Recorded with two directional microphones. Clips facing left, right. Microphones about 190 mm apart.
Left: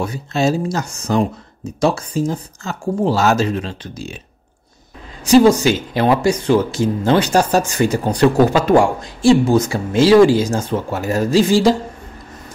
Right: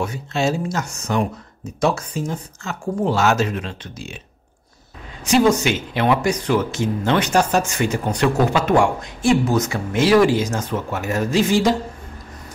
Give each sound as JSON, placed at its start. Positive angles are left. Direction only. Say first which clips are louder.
{"t": 0.0, "sound": "speech", "louder": "left 3 dB", "side_deg": 35}
{"t": 5.2, "sound": "speech", "louder": "left 5 dB", "side_deg": 35}